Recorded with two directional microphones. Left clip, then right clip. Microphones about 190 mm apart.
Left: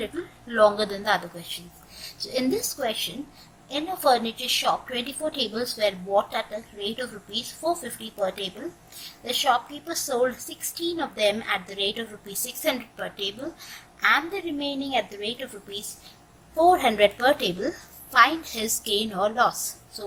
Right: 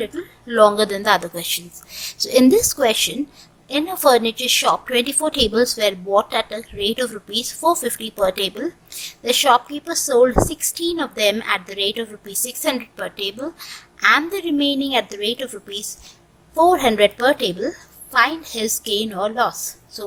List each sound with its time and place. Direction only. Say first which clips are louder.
0.0 s a woman's voice: right 5 dB; 20° right (ahead or behind)